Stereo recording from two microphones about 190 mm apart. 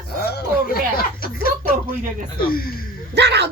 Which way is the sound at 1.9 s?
45° right (ahead or behind).